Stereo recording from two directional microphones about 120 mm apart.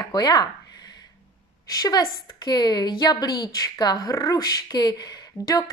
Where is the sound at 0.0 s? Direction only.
35° left (ahead or behind).